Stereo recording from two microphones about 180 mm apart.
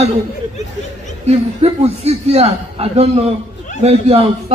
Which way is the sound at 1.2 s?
35° right (ahead or behind).